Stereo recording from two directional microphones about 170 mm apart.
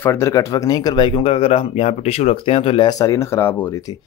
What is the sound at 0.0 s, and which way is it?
Speech, 15° left (ahead or behind).